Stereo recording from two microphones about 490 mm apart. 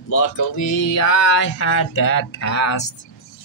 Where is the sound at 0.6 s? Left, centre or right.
Left.